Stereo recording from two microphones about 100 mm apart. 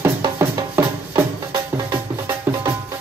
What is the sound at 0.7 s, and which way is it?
Music, 30° right (ahead or behind).